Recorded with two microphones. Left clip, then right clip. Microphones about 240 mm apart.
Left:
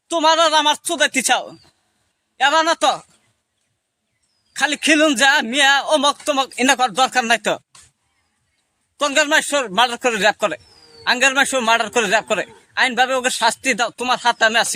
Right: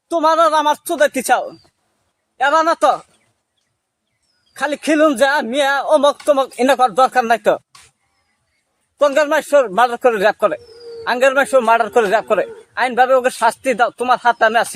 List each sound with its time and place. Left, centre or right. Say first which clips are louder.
0.1 s a man's voice: right 1 dB; left
0.9 s a man's voice: right 3 dB; left
4.5 s a man's voice: left 1 dB; left
9.0 s a man's voice: right 2 dB; left